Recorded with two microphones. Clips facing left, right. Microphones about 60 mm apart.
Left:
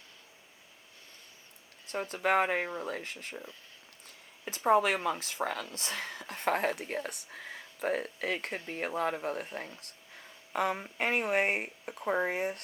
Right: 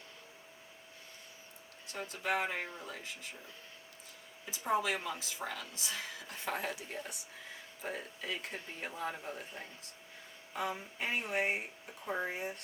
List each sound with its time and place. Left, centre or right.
1.9 s speech: left
4.4 s speech: left